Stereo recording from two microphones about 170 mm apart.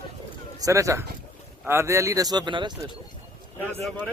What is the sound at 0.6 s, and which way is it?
Speech, 20° right (ahead or behind).